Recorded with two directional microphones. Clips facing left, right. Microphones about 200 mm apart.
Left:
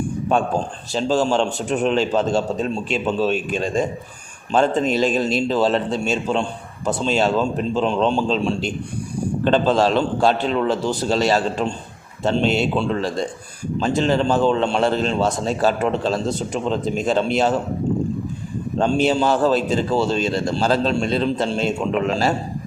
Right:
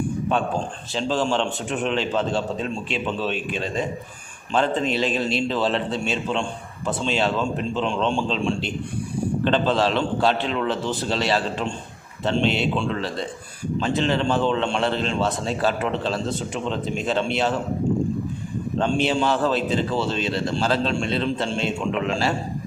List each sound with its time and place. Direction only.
0.9 s a man's voice: 40° left (ahead or behind)
18.8 s a man's voice: 40° left (ahead or behind)